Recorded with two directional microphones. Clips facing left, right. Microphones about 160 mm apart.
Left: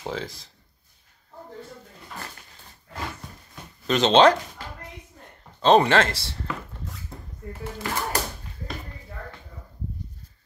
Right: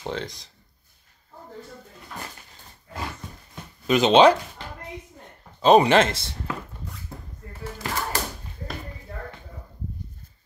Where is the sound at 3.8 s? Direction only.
10° right (ahead or behind).